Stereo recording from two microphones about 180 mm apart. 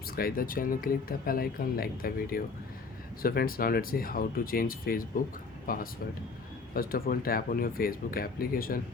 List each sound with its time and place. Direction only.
0.2 s speech: 55° left (ahead or behind)